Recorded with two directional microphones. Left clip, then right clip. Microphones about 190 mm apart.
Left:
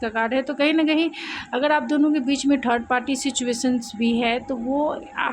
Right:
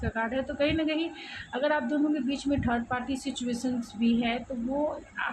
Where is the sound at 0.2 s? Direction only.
60° left (ahead or behind).